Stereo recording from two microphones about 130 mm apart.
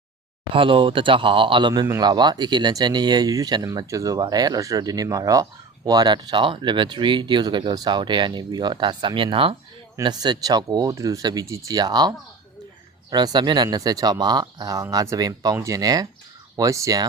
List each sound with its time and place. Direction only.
0.5 s speech: 45° right (ahead or behind); by 17.1 s 25° right (ahead or behind)